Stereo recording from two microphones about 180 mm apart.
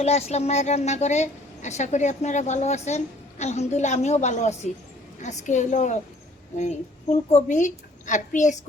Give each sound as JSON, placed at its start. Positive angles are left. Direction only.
{"t": 0.0, "sound": "a woman's voice", "side_deg": 35}
{"t": 7.3, "sound": "a woman's voice", "side_deg": 40}